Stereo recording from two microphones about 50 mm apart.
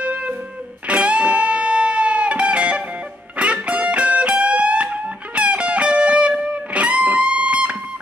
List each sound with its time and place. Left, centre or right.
0.0 s music: right